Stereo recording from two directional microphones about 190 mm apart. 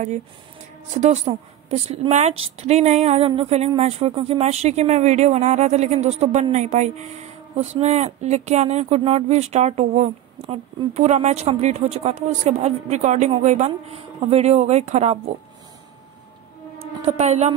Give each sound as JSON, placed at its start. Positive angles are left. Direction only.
{"t": 0.9, "sound": "speech", "side_deg": -35}
{"t": 17.0, "sound": "speech", "side_deg": -35}